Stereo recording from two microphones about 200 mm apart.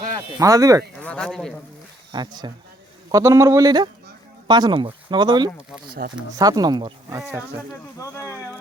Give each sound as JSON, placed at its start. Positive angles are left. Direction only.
{"t": 0.3, "sound": "speech", "side_deg": -15}
{"t": 1.0, "sound": "a man's voice", "side_deg": 5}
{"t": 2.1, "sound": "speech", "side_deg": -20}
{"t": 6.0, "sound": "speech", "side_deg": -50}
{"t": 6.3, "sound": "speech", "side_deg": -20}
{"t": 7.2, "sound": "speech", "side_deg": -10}
{"t": 7.9, "sound": "speech", "side_deg": 15}